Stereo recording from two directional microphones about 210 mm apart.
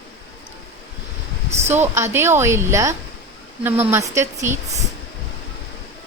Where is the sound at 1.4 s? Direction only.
30° right (ahead or behind).